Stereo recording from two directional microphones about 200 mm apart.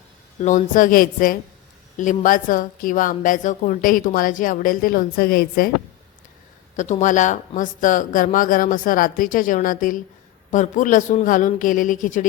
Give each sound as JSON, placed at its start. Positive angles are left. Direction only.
{"t": 0.4, "sound": "a woman's voice", "side_deg": 40}
{"t": 6.7, "sound": "speech", "side_deg": 40}